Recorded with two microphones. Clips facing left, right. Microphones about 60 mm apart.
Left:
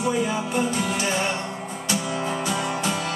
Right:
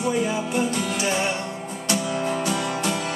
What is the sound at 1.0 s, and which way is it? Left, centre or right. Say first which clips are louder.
Music: right 1 dB; centre.